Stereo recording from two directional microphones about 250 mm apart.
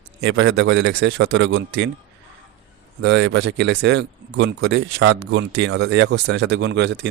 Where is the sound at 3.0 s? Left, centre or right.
Right.